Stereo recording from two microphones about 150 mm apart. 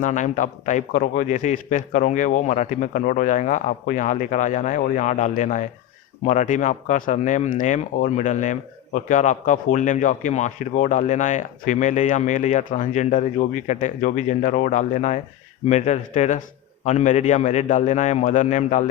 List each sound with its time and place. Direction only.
0.0 s speech: 60° left (ahead or behind)